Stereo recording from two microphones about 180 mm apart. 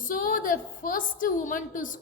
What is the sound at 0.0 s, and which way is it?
A woman's voice, 50° left (ahead or behind).